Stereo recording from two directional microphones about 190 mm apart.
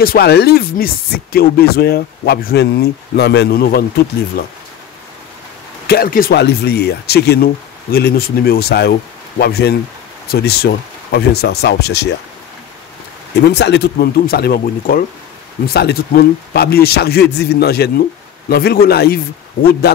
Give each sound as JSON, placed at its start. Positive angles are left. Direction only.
{"t": 0.0, "sound": "speech", "side_deg": 55}
{"t": 5.9, "sound": "speech", "side_deg": 50}
{"t": 13.5, "sound": "speech", "side_deg": 60}